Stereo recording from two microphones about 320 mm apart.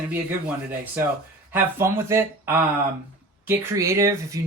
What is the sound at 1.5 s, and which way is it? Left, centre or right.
Speech, centre.